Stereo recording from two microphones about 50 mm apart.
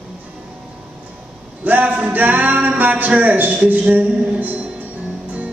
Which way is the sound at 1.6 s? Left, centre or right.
Right.